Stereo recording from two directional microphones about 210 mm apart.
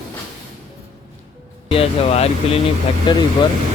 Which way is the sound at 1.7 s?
30° left (ahead or behind).